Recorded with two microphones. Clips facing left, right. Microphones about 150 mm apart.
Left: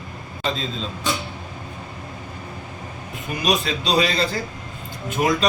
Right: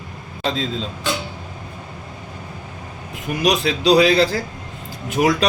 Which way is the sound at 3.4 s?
75° right (ahead or behind).